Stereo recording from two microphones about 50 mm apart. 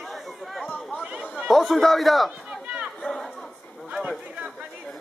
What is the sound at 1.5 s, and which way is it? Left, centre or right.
Speech, centre.